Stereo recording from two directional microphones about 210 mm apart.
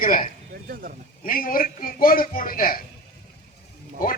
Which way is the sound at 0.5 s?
45° right (ahead or behind).